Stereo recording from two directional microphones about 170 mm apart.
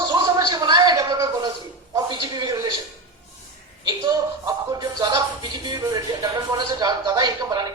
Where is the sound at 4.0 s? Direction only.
25° right (ahead or behind).